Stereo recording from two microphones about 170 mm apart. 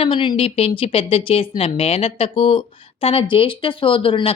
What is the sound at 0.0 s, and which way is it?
A woman's voice, 30° left (ahead or behind).